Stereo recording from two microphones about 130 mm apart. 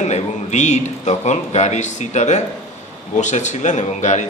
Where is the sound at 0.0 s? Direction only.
60° left (ahead or behind).